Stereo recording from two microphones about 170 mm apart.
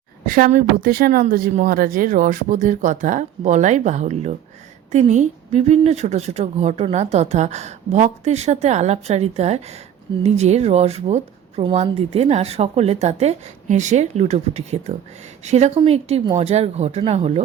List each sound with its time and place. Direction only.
0.3 s a woman's voice: 55° right (ahead or behind); by 17.4 s 35° right (ahead or behind)